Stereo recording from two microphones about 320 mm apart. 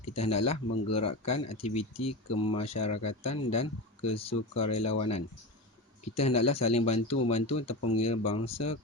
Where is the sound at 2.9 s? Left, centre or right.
Left.